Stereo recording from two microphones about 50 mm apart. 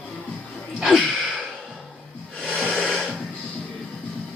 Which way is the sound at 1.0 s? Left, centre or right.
Centre.